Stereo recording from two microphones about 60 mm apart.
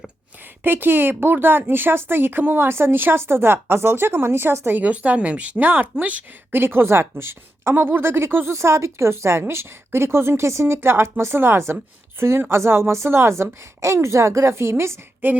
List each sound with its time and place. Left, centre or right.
0.6 s speech: right
4.8 s speech: right
8.5 s a woman's voice: right
15.2 s speech: right